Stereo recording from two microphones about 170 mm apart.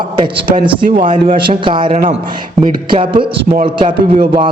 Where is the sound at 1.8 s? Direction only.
40° right (ahead or behind).